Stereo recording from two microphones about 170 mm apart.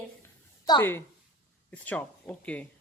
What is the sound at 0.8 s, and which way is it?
Speech, 15° left (ahead or behind).